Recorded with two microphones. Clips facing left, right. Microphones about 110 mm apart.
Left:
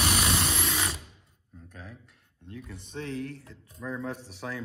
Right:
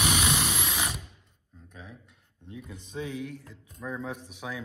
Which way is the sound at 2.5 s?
10° right (ahead or behind).